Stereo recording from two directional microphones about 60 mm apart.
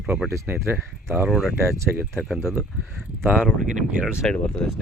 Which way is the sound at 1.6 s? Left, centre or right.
Right.